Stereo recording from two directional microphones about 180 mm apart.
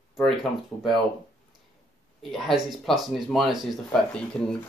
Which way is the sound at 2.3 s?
Centre (ahead or behind).